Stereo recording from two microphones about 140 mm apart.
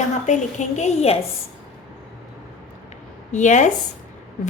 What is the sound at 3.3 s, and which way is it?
Speech, 60° left (ahead or behind).